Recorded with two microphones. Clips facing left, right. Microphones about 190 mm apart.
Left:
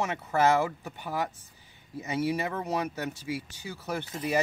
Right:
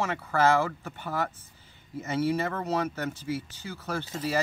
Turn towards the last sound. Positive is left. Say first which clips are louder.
# left 1 dB
turn(degrees=20)  # may be behind; listen again after turning